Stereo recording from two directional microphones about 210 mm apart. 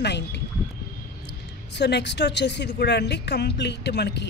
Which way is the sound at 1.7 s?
55° left (ahead or behind).